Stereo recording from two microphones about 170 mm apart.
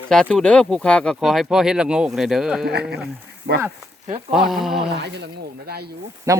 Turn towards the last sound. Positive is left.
turn(degrees=-20)  # may be behind; listen again after turning